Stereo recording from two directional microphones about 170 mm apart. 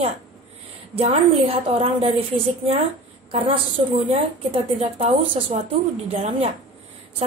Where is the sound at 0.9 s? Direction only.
35° right (ahead or behind).